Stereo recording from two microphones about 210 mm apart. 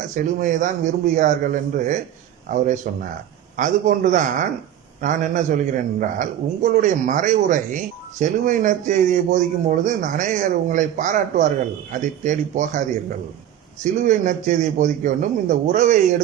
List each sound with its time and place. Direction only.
0.1 s a man's voice: 40° right (ahead or behind)
13.8 s a man's voice: 35° right (ahead or behind)